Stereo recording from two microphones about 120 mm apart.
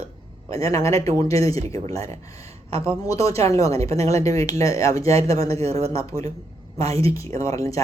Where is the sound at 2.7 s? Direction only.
55° right (ahead or behind).